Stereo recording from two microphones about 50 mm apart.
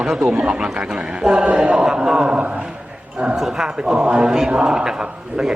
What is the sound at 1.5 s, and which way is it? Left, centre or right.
Mantra, right.